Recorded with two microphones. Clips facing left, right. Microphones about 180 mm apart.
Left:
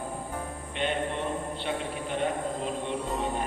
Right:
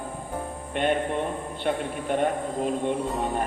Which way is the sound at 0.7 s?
50° right (ahead or behind).